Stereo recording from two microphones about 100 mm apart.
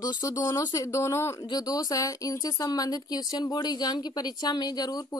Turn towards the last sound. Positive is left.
turn(degrees=40)  # may be behind; listen again after turning